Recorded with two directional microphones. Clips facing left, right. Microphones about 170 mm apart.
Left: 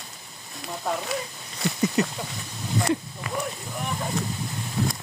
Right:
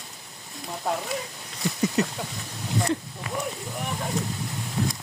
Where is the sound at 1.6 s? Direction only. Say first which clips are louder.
Left 1 dB; 70° left (ahead or behind).